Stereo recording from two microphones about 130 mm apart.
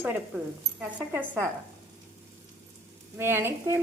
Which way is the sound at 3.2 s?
20° right (ahead or behind).